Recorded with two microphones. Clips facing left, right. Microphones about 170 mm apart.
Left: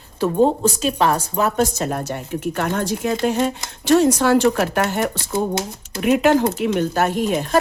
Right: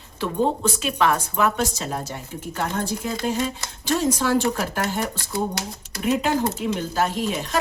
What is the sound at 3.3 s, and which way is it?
Speech, 60° left (ahead or behind).